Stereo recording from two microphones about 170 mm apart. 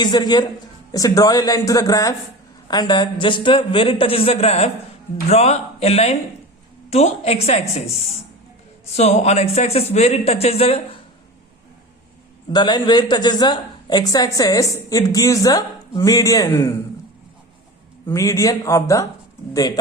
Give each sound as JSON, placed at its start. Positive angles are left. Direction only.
{"t": 0.0, "sound": "a man's voice", "side_deg": 25}
{"t": 12.5, "sound": "a woman's voice", "side_deg": 25}
{"t": 18.1, "sound": "a woman's voice", "side_deg": 20}